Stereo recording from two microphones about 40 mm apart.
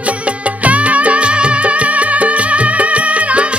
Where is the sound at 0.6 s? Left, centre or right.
Right.